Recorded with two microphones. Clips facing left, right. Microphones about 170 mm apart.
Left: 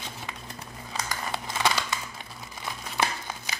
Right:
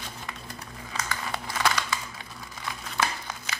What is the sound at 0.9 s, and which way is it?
Crumpling, 25° left (ahead or behind).